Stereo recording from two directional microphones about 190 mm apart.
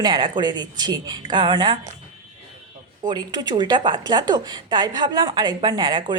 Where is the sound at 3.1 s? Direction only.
20° right (ahead or behind).